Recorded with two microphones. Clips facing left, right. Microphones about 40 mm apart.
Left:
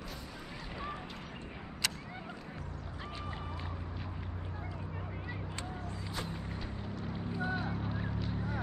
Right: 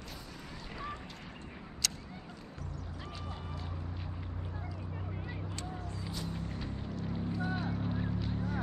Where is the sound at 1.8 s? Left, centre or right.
Centre.